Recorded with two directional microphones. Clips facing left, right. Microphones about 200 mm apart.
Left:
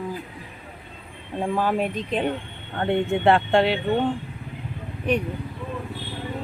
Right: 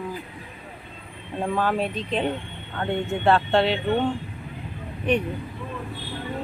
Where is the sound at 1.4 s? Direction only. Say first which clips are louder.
Left 1 dB; 10° left (ahead or behind).